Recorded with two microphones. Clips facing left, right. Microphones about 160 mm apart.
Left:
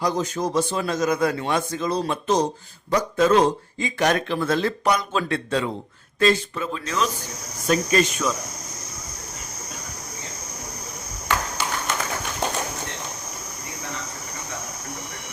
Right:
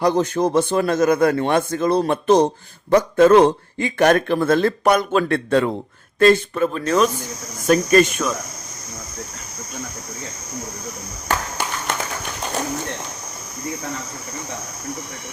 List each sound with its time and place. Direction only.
0.0 s a man's voice: 60° right (ahead or behind)